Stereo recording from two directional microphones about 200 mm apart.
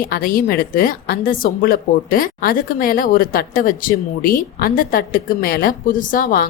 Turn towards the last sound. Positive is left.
turn(degrees=45)  # may be behind; listen again after turning